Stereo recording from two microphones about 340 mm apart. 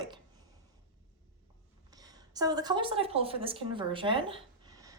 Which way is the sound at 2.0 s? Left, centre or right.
Centre.